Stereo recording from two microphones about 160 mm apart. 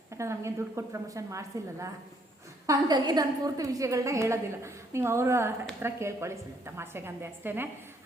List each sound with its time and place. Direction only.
0.2 s a woman's voice: 20° right (ahead or behind)